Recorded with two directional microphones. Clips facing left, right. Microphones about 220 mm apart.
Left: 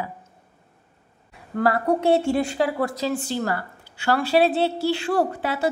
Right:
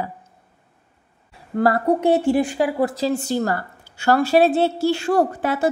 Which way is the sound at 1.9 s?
20° right (ahead or behind).